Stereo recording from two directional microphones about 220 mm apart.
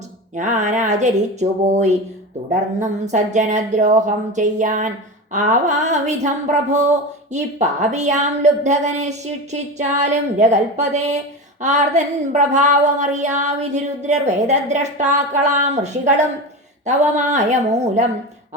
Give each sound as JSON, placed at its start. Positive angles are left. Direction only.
{"t": 0.3, "sound": "speech", "side_deg": -35}